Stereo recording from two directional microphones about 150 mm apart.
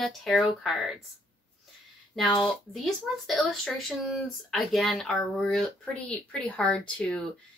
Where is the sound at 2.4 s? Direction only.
Centre (ahead or behind).